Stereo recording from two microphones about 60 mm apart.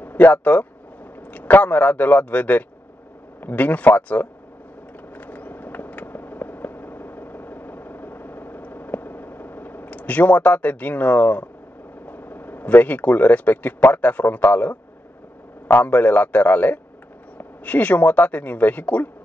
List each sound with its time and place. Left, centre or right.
0.0 s speech: left
5.1 s a sound: left
12.1 s speech: left